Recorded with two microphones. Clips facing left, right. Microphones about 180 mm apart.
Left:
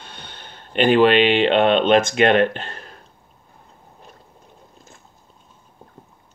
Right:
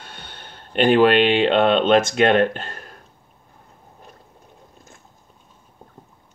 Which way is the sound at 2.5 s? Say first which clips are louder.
Even; 45° right (ahead or behind).